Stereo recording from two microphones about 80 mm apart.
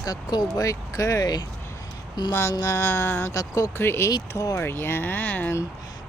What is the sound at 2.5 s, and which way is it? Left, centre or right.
Speech, left.